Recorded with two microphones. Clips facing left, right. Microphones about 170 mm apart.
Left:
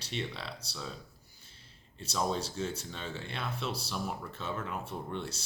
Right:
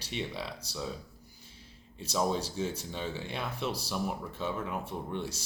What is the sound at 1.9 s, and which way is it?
Speech, 10° right (ahead or behind).